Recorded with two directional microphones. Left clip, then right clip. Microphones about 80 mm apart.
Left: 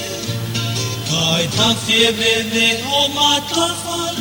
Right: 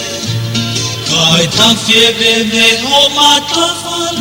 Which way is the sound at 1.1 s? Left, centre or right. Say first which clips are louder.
Right 8 dB; right.